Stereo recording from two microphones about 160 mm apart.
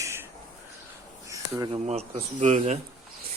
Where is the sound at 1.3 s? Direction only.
20° right (ahead or behind).